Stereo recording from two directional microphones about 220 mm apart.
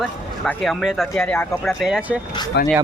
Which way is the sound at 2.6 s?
50° left (ahead or behind).